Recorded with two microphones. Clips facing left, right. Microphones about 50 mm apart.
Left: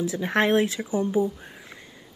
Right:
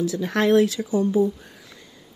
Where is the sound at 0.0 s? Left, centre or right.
Left.